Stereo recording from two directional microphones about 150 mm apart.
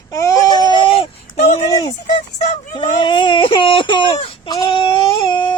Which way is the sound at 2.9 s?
30° left (ahead or behind).